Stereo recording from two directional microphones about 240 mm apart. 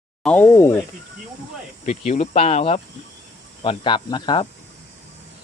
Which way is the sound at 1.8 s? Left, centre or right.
Left.